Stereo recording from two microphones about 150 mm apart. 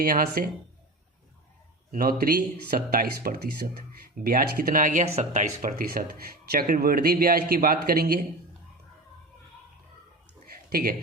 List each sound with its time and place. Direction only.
0.0 s speech: 75° right (ahead or behind)
1.9 s speech: 75° right (ahead or behind); by 5.5 s 50° right (ahead or behind)
5.6 s a man's voice: 75° right (ahead or behind)
10.7 s speech: 80° right